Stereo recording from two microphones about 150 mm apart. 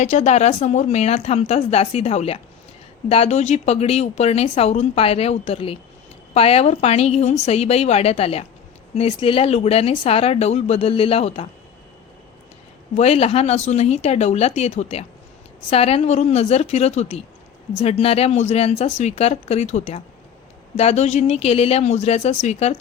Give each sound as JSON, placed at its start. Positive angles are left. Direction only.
{"t": 0.0, "sound": "speech", "side_deg": 50}
{"t": 12.9, "sound": "speech", "side_deg": 45}